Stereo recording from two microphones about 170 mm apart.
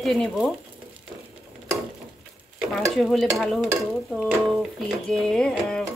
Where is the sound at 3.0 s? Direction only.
Centre (ahead or behind).